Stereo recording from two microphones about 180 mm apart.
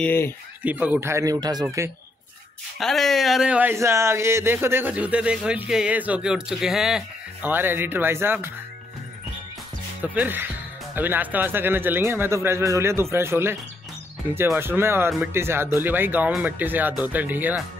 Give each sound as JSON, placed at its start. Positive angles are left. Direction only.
{"t": 0.0, "sound": "speech", "side_deg": 10}
{"t": 0.6, "sound": "speech", "side_deg": -10}
{"t": 2.8, "sound": "speech", "side_deg": 0}
{"t": 10.1, "sound": "speech", "side_deg": -10}